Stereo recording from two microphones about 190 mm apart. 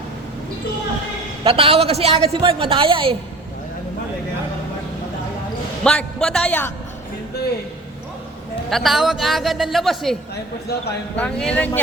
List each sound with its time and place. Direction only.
1.5 s a woman's voice: 30° right (ahead or behind)
5.8 s a man's voice: 5° left (ahead or behind)
8.7 s a man's voice: centre (ahead or behind)
11.2 s a man's voice: 5° left (ahead or behind)